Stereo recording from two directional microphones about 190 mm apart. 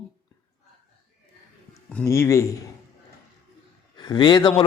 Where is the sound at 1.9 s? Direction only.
15° left (ahead or behind).